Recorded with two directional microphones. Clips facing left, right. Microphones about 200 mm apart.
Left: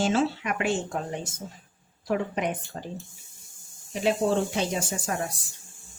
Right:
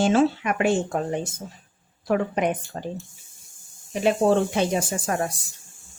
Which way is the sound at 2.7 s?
55° right (ahead or behind).